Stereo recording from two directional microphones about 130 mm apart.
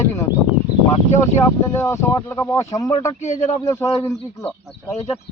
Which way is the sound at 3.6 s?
20° left (ahead or behind).